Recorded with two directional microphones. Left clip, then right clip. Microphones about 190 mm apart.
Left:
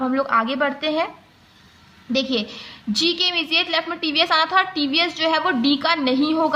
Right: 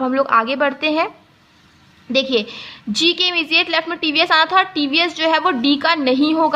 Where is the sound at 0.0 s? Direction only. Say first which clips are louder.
Right 4 dB; 35° right (ahead or behind).